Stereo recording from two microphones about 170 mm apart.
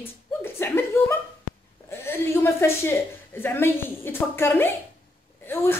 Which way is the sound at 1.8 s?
15° left (ahead or behind).